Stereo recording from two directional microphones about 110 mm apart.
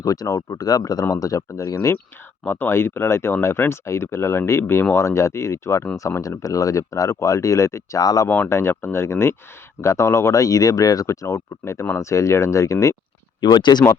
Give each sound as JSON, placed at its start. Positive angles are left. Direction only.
{"t": 0.0, "sound": "speech", "side_deg": 30}
{"t": 2.4, "sound": "speech", "side_deg": 20}
{"t": 8.3, "sound": "speech", "side_deg": 20}
{"t": 13.4, "sound": "speech", "side_deg": 45}